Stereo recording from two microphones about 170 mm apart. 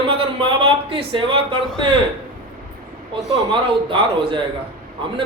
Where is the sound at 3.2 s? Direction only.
Centre (ahead or behind).